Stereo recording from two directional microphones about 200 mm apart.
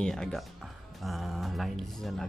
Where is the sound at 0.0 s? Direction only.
5° left (ahead or behind).